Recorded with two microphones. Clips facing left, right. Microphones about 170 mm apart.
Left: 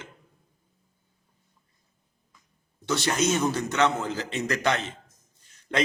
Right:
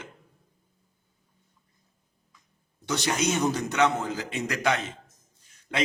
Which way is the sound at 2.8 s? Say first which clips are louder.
Left 2 dB; 15° right (ahead or behind).